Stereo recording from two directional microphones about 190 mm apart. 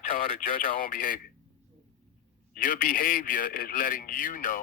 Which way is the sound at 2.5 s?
45° left (ahead or behind).